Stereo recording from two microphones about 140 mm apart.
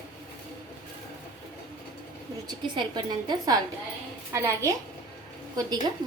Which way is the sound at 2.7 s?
30° right (ahead or behind).